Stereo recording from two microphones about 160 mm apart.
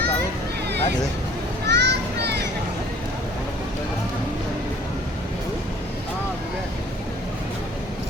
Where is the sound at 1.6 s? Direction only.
90° right.